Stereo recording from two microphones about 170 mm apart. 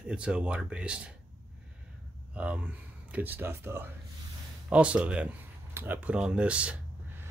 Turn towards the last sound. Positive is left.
turn(degrees=-10)  # may be behind; listen again after turning